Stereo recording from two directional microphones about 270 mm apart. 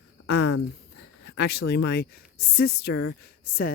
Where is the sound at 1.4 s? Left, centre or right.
Left.